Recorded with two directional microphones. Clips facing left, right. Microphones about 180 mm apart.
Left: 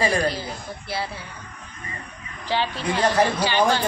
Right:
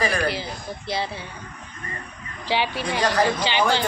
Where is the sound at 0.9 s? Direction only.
25° right (ahead or behind).